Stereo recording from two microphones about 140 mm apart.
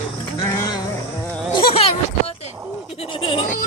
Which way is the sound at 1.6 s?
40° left (ahead or behind).